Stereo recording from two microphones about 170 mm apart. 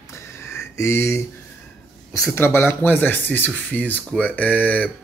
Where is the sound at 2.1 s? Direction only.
15° left (ahead or behind).